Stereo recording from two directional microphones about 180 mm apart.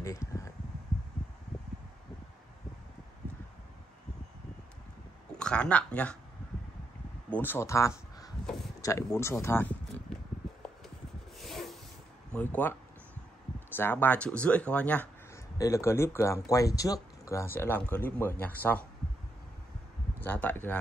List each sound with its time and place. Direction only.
0.0 s a sound: 15° left (ahead or behind)
5.4 s speech: 5° left (ahead or behind)
7.2 s speech: 10° left (ahead or behind)
11.3 s a sound: centre (ahead or behind)
12.4 s speech: 10° left (ahead or behind)
13.7 s speech: 10° left (ahead or behind)
20.2 s speech: 10° left (ahead or behind)